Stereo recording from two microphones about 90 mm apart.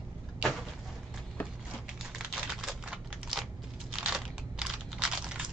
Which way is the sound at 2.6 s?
5° right (ahead or behind).